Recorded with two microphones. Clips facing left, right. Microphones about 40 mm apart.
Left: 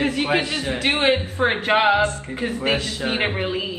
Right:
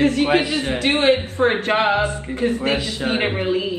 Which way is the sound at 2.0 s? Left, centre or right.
Centre.